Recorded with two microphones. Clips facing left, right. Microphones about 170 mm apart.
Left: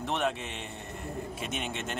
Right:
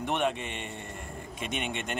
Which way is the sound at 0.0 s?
Centre (ahead or behind).